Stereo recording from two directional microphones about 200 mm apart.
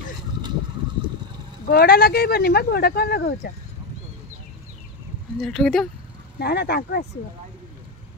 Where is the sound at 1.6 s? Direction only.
50° left (ahead or behind).